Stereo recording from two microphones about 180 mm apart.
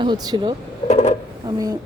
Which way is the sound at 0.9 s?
40° left (ahead or behind).